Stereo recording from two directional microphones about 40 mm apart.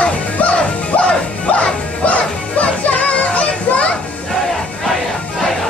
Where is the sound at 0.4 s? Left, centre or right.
Left.